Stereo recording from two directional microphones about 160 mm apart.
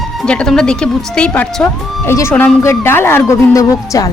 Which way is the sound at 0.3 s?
5° left (ahead or behind).